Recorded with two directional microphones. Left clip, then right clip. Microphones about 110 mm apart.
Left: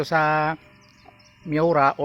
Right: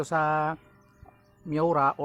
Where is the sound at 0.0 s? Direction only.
15° left (ahead or behind).